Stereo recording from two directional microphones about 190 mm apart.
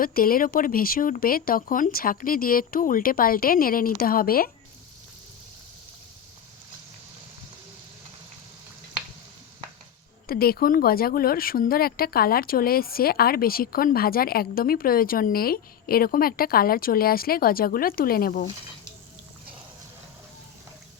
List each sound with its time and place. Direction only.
0.0 s speech: 50° left (ahead or behind)
10.2 s speech: 55° left (ahead or behind)